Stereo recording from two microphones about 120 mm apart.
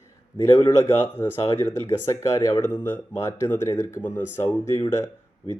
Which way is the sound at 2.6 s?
15° left (ahead or behind).